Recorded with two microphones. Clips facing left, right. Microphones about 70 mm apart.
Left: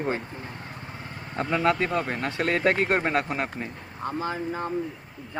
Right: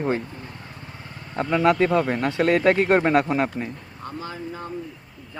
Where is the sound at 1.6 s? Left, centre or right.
Centre.